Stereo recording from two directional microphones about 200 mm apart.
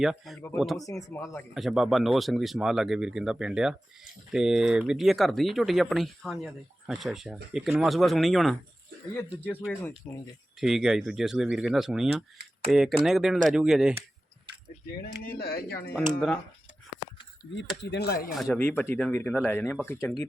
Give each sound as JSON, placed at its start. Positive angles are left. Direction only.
{"t": 0.0, "sound": "speech", "side_deg": 0}
{"t": 0.9, "sound": "speech", "side_deg": 15}
{"t": 1.5, "sound": "speech", "side_deg": 0}
{"t": 10.6, "sound": "speech", "side_deg": 0}
{"t": 15.2, "sound": "speech", "side_deg": 50}
{"t": 17.5, "sound": "speech", "side_deg": 60}
{"t": 18.3, "sound": "speech", "side_deg": 5}